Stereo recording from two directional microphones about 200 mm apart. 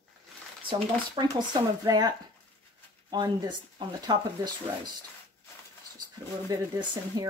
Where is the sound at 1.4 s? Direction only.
20° right (ahead or behind).